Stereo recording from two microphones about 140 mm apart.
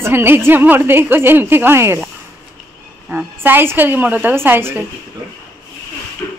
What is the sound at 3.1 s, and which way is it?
A woman's voice, 10° right (ahead or behind).